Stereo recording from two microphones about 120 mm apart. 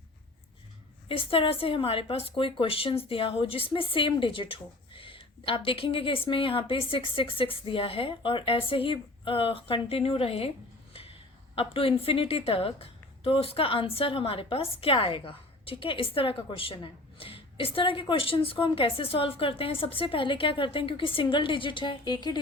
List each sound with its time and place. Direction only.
1.0 s a woman's voice: 50° left (ahead or behind)
11.5 s a woman's voice: 50° left (ahead or behind); by 22.4 s 35° left (ahead or behind)